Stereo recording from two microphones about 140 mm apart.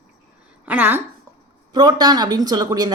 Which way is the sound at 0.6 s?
10° right (ahead or behind).